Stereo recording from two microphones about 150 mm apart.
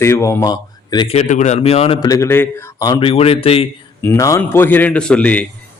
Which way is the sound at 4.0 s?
15° left (ahead or behind).